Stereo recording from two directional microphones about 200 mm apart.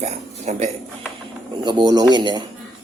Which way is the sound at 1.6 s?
20° right (ahead or behind).